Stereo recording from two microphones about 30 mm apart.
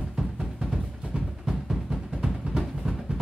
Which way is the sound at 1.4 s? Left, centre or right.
Centre.